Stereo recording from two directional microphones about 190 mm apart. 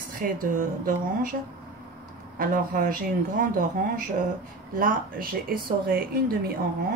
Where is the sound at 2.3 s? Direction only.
45° right (ahead or behind).